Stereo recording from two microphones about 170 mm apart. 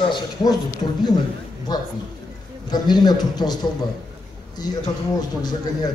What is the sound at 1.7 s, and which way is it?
Speech, 25° left (ahead or behind).